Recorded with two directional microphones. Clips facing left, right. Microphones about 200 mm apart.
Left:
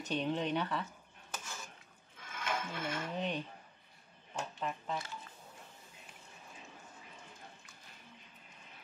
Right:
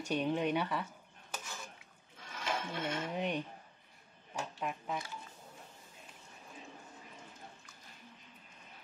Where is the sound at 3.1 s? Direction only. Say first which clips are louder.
Right 1 dB; 10° right (ahead or behind).